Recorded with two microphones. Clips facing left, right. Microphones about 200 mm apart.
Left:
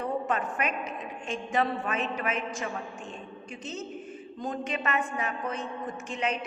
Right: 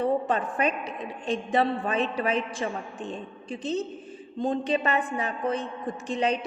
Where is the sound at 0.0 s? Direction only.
30° right (ahead or behind).